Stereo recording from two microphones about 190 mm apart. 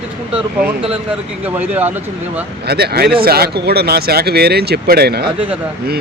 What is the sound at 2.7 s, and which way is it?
Speech, 55° right (ahead or behind).